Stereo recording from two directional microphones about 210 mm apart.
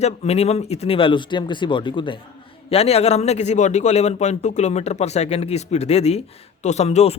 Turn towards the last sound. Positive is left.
turn(degrees=30)  # may be behind; listen again after turning